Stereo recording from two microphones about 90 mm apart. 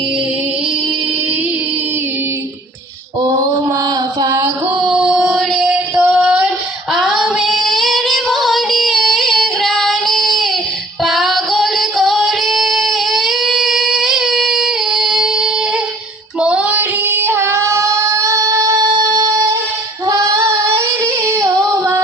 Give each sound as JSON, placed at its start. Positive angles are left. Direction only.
{"t": 3.2, "sound": "mantra", "side_deg": -45}
{"t": 4.9, "sound": "female singing", "side_deg": -10}
{"t": 16.4, "sound": "child singing", "side_deg": -10}